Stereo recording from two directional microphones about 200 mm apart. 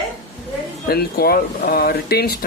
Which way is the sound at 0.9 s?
50° left (ahead or behind).